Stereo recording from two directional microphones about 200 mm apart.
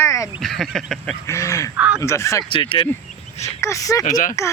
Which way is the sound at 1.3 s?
15° left (ahead or behind).